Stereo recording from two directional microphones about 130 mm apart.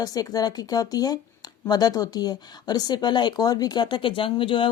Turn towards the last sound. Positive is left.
turn(degrees=40)  # may be behind; listen again after turning